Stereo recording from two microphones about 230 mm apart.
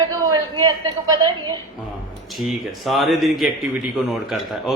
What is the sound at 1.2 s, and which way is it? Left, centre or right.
Speech, centre.